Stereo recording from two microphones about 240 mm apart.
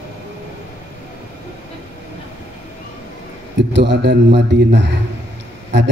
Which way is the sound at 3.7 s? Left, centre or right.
Right.